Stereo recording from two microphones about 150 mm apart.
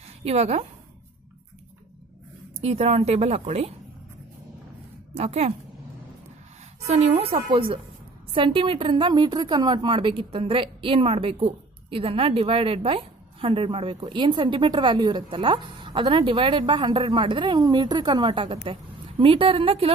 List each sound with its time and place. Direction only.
0.2 s speech: 45° right (ahead or behind)
2.6 s speech: 45° right (ahead or behind)
5.1 s speech: 45° right (ahead or behind)
6.9 s a woman's voice: 40° right (ahead or behind)